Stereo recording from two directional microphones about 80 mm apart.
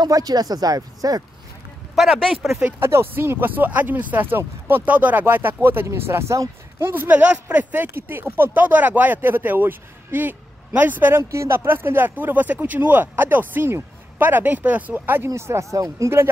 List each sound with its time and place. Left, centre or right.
0.0 s speech: right
2.0 s speech: centre
2.8 s speech: right
6.9 s speech: right
11.2 s speech: right
15.2 s speech: right